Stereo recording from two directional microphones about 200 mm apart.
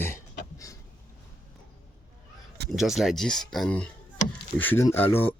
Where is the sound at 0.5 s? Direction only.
15° left (ahead or behind).